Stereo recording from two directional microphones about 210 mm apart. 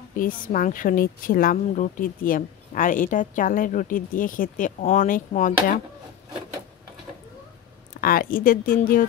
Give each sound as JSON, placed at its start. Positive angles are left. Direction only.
{"t": 0.2, "sound": "speech", "side_deg": 40}
{"t": 8.0, "sound": "speech", "side_deg": 45}